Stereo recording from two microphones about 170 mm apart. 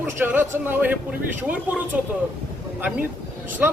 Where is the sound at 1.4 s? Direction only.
10° right (ahead or behind).